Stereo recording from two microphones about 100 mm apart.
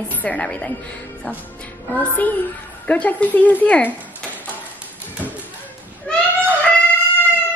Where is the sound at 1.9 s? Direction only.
15° left (ahead or behind).